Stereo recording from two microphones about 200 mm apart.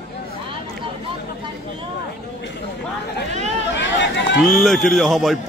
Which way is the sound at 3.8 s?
60° left (ahead or behind).